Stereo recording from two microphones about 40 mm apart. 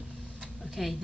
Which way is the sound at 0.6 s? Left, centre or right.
Centre.